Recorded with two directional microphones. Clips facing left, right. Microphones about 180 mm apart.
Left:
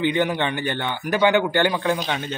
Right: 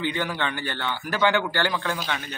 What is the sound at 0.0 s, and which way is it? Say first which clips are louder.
A man's voice: left 6 dB; 20° left (ahead or behind).